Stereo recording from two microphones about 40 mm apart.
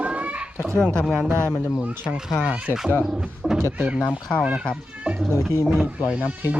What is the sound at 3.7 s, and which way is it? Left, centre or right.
Speech, right.